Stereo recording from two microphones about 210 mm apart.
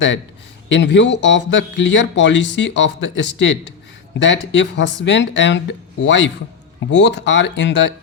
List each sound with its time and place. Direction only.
0.7 s speech: 60° left (ahead or behind)